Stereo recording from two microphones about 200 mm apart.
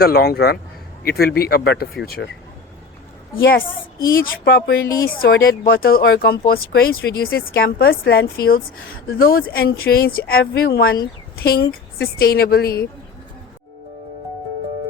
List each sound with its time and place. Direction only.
0.0 s speech: 50° left (ahead or behind)
3.3 s speech: 50° left (ahead or behind)